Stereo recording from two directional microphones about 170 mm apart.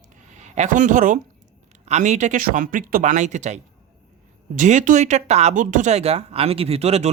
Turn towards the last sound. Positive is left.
turn(degrees=-40)  # may be behind; listen again after turning